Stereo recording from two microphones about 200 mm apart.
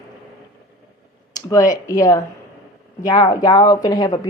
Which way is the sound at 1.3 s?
15° left (ahead or behind).